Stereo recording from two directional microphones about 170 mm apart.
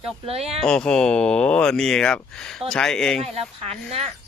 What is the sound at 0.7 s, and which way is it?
Speech, 5° left (ahead or behind).